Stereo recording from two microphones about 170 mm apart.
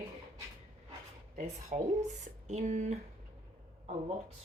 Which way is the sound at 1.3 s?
45° right (ahead or behind).